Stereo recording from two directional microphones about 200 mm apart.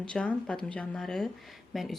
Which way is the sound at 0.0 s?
5° left (ahead or behind).